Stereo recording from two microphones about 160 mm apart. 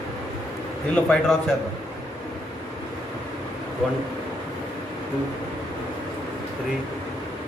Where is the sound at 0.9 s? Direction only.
5° left (ahead or behind).